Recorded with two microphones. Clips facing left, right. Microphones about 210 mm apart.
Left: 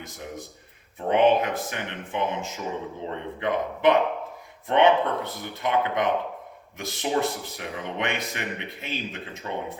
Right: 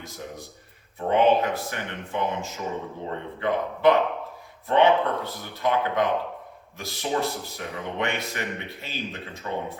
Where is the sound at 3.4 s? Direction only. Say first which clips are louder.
Right 1 dB; 20° left (ahead or behind).